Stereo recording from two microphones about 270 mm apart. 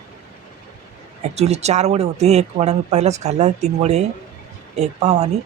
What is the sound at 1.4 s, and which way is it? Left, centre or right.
Speech, right.